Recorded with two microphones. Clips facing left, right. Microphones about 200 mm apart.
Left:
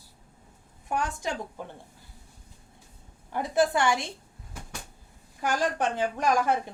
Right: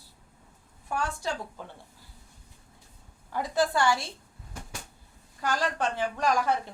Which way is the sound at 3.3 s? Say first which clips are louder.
Left 2 dB; 20° left (ahead or behind).